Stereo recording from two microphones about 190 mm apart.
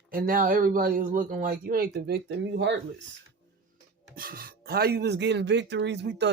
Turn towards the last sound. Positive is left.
turn(degrees=-65)  # may be behind; listen again after turning